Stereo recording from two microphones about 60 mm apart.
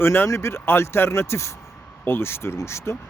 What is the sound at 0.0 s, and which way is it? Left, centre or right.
Speech, left.